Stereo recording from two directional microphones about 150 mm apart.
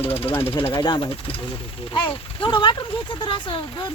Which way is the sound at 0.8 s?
30° left (ahead or behind).